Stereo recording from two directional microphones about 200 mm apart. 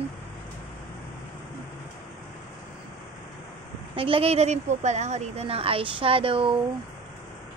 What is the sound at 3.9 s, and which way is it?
A woman's voice, 25° right (ahead or behind).